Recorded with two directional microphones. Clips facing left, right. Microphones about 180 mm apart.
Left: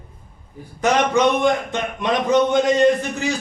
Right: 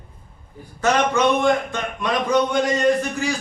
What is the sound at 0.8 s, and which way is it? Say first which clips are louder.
A man's voice: left 2 dB; 15° left (ahead or behind).